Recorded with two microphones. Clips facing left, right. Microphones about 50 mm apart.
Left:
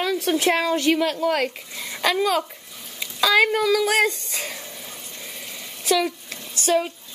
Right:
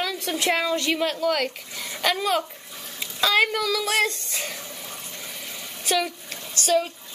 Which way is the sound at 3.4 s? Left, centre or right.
Left.